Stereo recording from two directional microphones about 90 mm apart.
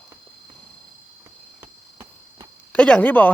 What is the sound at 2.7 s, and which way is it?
Speech, 15° left (ahead or behind).